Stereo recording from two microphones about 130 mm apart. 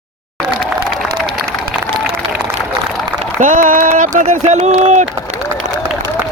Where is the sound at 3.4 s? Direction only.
90° right; by 5.0 s 60° right (ahead or behind).